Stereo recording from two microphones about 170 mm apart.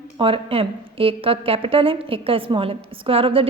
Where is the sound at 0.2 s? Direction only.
35° right (ahead or behind).